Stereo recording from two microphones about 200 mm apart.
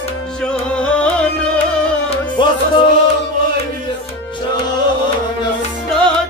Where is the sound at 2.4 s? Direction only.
25° left (ahead or behind).